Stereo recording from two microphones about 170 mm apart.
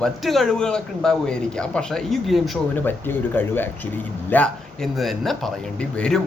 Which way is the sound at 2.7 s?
10° left (ahead or behind).